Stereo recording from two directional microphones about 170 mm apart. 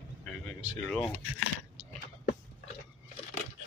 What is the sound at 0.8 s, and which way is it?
Speech, 5° left (ahead or behind).